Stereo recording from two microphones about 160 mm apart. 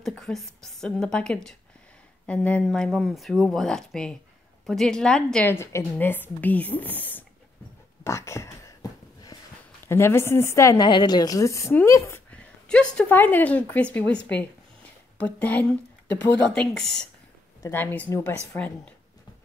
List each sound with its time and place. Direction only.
0.0 s a woman's voice: centre (ahead or behind)
8.0 s a sound: 15° left (ahead or behind)
9.8 s a woman's voice: 15° left (ahead or behind)
12.6 s a woman's voice: 5° left (ahead or behind)
17.6 s a woman's voice: 15° left (ahead or behind)